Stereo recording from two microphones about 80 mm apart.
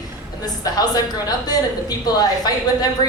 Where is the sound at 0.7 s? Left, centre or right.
Left.